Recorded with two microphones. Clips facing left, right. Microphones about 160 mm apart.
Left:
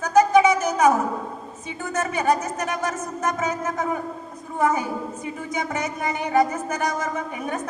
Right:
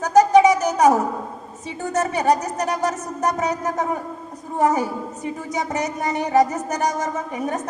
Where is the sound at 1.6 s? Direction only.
40° right (ahead or behind).